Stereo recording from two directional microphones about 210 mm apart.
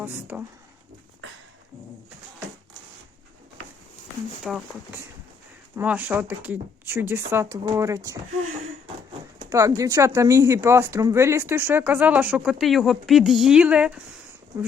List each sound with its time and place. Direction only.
0.0 s speech: 10° right (ahead or behind)
4.5 s speech: centre (ahead or behind)
5.7 s speech: 10° right (ahead or behind)
9.5 s speech: 15° right (ahead or behind)